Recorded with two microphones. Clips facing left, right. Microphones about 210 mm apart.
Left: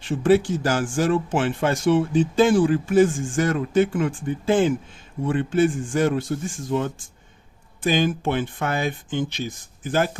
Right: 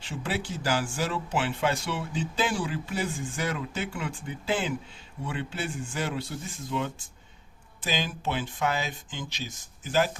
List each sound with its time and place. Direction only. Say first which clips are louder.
0.0 s speech: left 15 dB; 50° left (ahead or behind)